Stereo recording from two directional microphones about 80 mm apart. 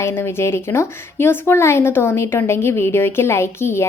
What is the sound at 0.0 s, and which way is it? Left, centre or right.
A woman's voice, left.